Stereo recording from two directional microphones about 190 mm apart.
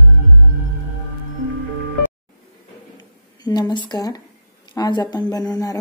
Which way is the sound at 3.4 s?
20° left (ahead or behind).